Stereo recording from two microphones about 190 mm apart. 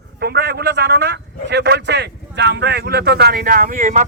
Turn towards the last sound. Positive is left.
turn(degrees=-40)  # may be behind; listen again after turning